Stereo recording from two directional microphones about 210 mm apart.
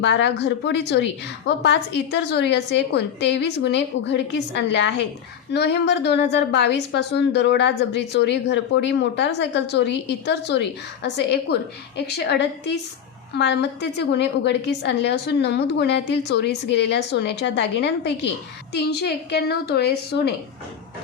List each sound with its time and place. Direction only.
0.0 s a woman's voice: 55° left (ahead or behind)